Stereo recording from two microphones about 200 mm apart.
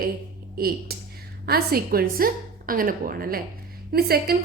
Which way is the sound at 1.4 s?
50° right (ahead or behind).